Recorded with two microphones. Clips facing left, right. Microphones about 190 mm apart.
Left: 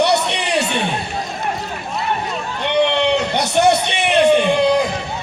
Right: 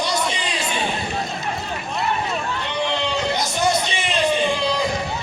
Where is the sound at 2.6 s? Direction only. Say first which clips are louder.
Left 11 dB; 65° left (ahead or behind).